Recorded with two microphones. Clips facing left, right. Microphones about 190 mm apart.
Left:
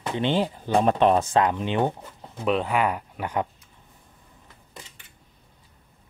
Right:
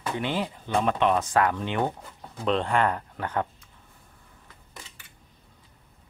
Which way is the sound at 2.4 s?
5° left (ahead or behind).